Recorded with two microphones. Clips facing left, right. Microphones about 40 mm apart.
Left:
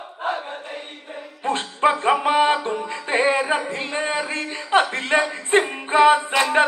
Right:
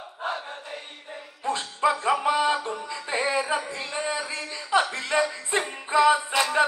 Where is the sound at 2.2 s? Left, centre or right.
Left.